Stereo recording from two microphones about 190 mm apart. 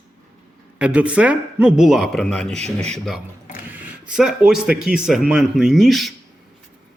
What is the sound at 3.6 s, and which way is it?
A man's voice, 10° right (ahead or behind).